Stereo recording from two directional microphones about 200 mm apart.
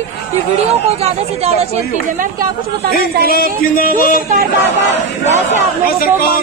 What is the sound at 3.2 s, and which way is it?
A man's voice, 45° left (ahead or behind).